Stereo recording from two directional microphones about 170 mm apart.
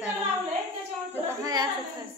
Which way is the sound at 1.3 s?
20° right (ahead or behind).